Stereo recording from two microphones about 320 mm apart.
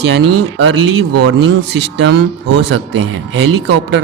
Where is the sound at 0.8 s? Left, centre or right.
Right.